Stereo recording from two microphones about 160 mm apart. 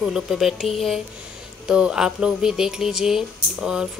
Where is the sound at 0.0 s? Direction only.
Centre (ahead or behind).